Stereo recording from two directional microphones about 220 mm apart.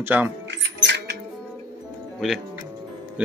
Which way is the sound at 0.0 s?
5° right (ahead or behind).